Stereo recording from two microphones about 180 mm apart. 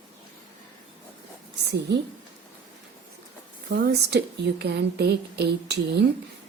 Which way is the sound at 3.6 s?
60° right (ahead or behind).